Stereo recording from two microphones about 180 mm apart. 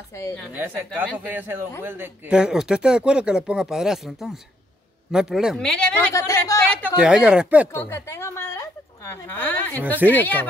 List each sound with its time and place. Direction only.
0.1 s a woman's voice: 15° left (ahead or behind)
0.9 s a man's voice: 10° right (ahead or behind); by 6.9 s 10° left (ahead or behind)
7.0 s speech: 5° right (ahead or behind)
7.6 s a sound: 15° left (ahead or behind)
10.0 s speech: 10° left (ahead or behind)